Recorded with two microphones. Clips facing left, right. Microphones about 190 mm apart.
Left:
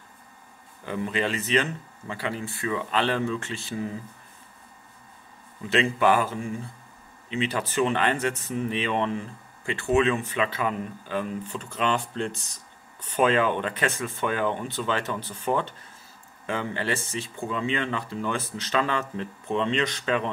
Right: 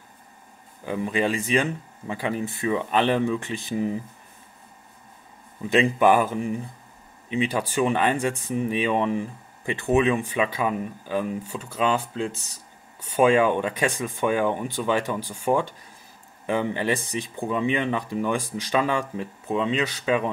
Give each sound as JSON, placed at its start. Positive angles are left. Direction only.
{"t": 0.8, "sound": "speech", "side_deg": -15}
{"t": 5.7, "sound": "speech", "side_deg": -15}